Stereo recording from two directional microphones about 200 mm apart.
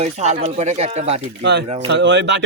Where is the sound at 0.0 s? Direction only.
35° right (ahead or behind).